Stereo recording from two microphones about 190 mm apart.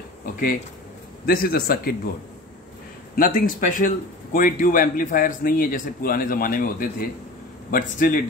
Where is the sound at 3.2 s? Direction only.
45° left (ahead or behind).